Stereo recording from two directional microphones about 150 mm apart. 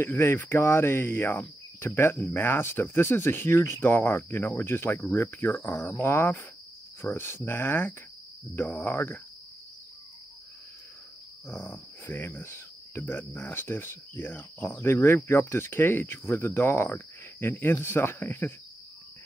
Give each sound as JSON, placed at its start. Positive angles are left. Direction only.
{"t": 0.0, "sound": "speech", "side_deg": 15}
{"t": 11.4, "sound": "speech", "side_deg": 15}